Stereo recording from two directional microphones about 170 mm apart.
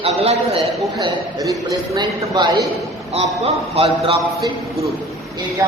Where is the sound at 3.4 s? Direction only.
35° right (ahead or behind).